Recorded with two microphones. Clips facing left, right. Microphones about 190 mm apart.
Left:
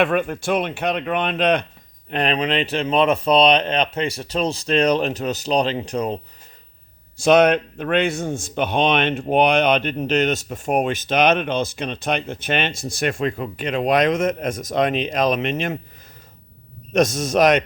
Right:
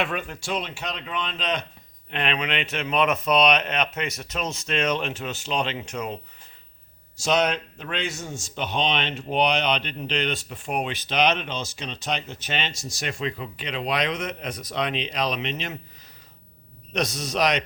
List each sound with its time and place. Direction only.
0.0 s speech: 55° left (ahead or behind)
2.0 s speech: 40° left (ahead or behind)
7.2 s a man's voice: 55° left (ahead or behind)
16.9 s a man's voice: 50° left (ahead or behind)